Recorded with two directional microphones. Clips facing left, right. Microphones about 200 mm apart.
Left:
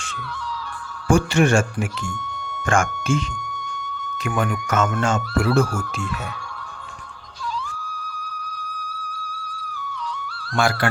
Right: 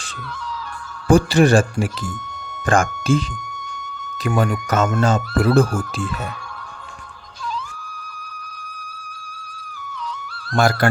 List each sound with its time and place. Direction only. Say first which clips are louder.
1.0 s speech: right 4 dB; 35° right (ahead or behind)
10.2 s music: right 4 dB; 45° right (ahead or behind)